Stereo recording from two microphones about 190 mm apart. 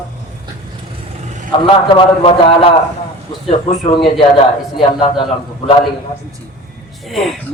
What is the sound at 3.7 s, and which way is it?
A man's voice, 30° left (ahead or behind).